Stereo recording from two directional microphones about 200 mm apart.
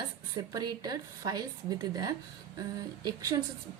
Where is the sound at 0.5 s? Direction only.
20° right (ahead or behind).